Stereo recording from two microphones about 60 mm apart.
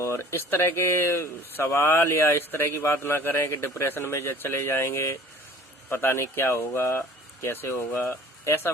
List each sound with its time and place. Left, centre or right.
0.0 s a man's voice: left